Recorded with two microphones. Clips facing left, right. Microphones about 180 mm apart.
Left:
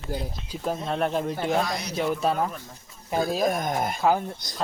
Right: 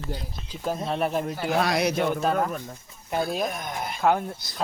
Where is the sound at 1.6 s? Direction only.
70° right (ahead or behind).